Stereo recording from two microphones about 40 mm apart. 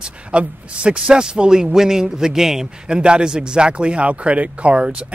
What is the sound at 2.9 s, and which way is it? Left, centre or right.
Speech, right.